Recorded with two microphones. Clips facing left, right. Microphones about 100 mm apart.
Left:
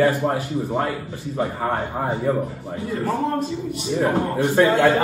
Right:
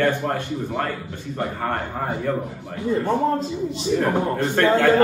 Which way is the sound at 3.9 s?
5° left (ahead or behind).